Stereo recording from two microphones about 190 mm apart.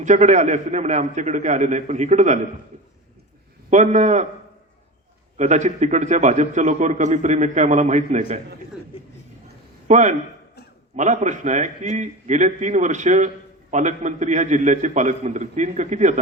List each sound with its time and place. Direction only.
0.0 s a man's voice: 40° right (ahead or behind)
3.7 s a man's voice: 40° right (ahead or behind)
5.4 s a man's voice: 40° right (ahead or behind)
9.8 s a man's voice: 40° right (ahead or behind)